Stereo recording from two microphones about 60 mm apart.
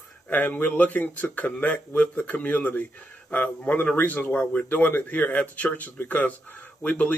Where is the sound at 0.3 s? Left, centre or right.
Left.